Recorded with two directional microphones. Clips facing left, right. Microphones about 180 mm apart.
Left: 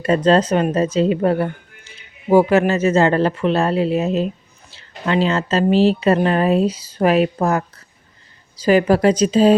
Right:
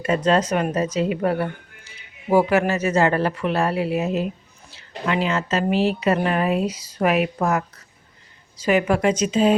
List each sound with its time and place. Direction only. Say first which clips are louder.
0.0 s a woman's voice: left 5 dB; 30° left (ahead or behind)